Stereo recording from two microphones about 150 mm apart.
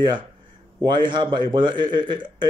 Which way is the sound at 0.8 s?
30° right (ahead or behind).